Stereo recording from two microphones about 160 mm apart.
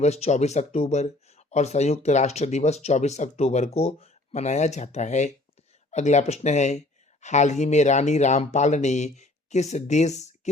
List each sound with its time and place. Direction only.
0.0 s speech: 45° left (ahead or behind)